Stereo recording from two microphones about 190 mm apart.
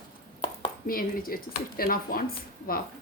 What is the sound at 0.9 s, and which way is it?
A woman's voice, 50° left (ahead or behind).